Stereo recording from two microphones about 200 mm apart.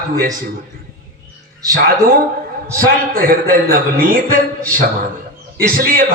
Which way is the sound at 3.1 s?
45° right (ahead or behind).